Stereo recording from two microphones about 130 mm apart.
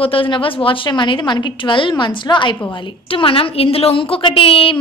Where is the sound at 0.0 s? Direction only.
45° left (ahead or behind).